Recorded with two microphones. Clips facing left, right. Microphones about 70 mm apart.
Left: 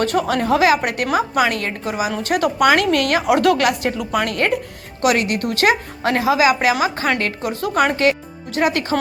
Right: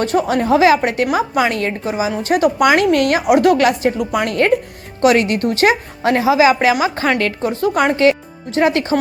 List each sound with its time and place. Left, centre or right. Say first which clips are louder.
0.0 s a woman's voice: right 2 dB; right
1.9 s a woman's voice: right 2 dB; right
4.3 s a woman's voice: right 5 dB; right